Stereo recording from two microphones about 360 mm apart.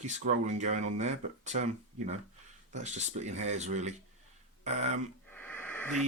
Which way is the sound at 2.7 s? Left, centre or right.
Centre.